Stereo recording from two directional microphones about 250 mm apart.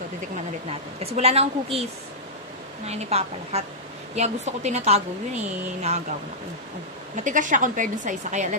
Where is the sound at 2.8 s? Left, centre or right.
Right.